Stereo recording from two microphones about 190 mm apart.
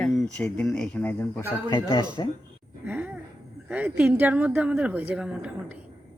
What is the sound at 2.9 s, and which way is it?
Speech, 5° right (ahead or behind).